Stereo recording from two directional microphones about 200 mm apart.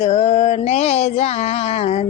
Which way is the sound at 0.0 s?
35° left (ahead or behind).